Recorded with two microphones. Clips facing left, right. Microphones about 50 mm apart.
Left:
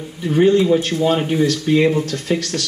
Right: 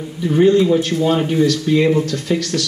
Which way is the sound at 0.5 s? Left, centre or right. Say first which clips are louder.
Right 1 dB; centre.